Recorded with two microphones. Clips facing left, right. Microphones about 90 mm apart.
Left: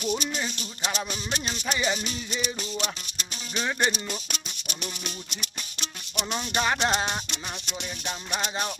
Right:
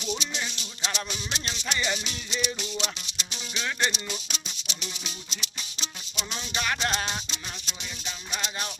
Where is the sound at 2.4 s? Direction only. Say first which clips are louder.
Right 1 dB; 40° left (ahead or behind).